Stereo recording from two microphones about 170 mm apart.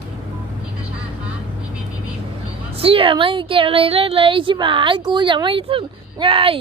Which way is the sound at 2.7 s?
35° right (ahead or behind).